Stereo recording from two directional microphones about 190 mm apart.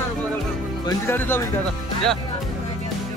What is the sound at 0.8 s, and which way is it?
Speech, 10° left (ahead or behind).